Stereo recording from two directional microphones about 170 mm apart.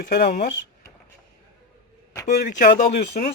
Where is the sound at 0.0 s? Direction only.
70° left (ahead or behind).